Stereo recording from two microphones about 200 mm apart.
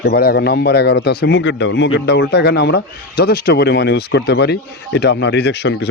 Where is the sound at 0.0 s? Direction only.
55° left (ahead or behind).